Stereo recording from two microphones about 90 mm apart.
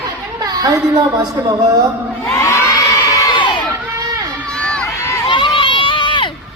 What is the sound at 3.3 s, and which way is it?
Crowd, 65° left (ahead or behind).